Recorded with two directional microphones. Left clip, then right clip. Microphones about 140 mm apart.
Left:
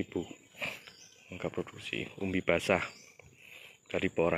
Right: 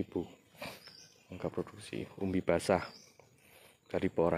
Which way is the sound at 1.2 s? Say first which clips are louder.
Left 1 dB; 5° right (ahead or behind).